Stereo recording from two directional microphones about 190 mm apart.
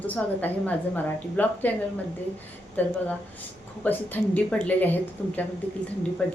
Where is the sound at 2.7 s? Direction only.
10° left (ahead or behind).